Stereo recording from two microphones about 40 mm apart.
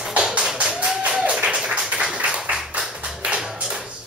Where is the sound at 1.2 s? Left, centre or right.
Right.